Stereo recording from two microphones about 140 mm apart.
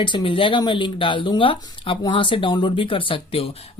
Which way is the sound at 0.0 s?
35° left (ahead or behind).